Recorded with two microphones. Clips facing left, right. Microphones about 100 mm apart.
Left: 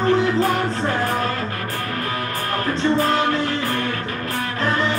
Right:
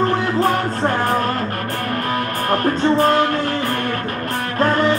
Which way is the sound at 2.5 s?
50° right (ahead or behind).